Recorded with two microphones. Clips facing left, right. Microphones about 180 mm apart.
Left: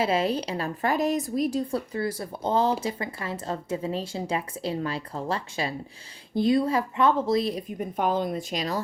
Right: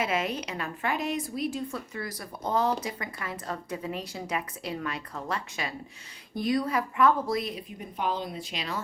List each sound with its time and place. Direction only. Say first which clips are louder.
0.0 s a woman's voice: left 5 dB; 30° left (ahead or behind)
7.5 s speech: left 8 dB; 50° left (ahead or behind)